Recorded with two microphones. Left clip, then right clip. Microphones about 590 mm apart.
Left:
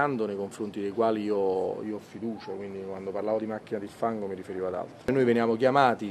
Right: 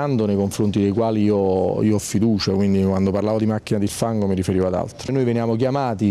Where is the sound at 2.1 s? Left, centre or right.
Right.